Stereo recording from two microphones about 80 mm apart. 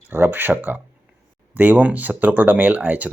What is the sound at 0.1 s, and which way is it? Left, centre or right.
Speech, right.